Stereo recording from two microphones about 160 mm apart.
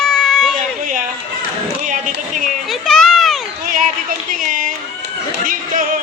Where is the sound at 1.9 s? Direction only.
50° right (ahead or behind).